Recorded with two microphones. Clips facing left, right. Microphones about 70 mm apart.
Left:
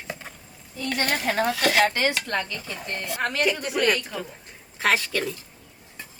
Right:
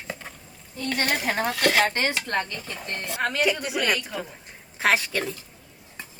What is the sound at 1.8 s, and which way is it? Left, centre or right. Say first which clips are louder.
Speech: left 2 dB; right.